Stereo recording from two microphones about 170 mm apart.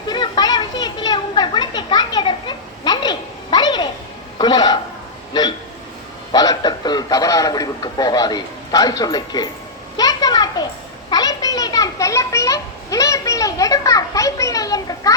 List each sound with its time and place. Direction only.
0.1 s children playing: 25° left (ahead or behind)
4.4 s speech: 25° left (ahead or behind)
5.3 s a sound: 25° left (ahead or behind)
6.3 s a man's voice: 20° left (ahead or behind)
10.0 s a sound: 20° left (ahead or behind)
11.1 s a child's voice: 20° left (ahead or behind)